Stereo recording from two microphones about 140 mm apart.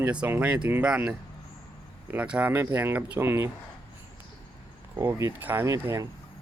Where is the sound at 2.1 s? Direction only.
10° right (ahead or behind).